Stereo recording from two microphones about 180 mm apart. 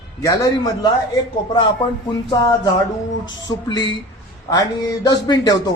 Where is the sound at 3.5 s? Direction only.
20° left (ahead or behind).